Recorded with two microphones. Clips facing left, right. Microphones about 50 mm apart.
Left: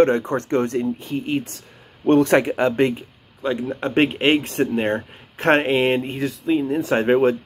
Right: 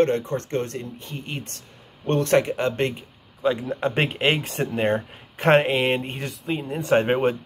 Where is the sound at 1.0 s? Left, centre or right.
Centre.